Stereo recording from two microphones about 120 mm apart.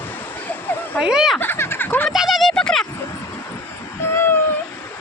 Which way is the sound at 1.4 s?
20° left (ahead or behind).